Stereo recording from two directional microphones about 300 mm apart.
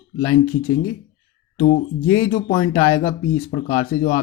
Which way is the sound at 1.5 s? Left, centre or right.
Left.